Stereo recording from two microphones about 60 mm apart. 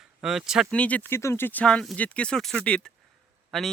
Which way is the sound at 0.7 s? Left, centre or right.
Left.